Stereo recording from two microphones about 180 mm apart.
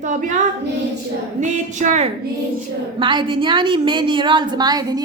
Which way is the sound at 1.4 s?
40° right (ahead or behind).